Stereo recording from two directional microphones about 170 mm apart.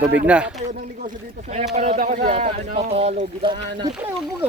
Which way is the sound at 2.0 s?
55° right (ahead or behind).